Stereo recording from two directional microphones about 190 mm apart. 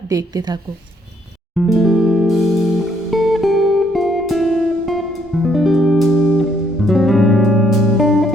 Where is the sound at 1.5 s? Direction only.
Centre (ahead or behind).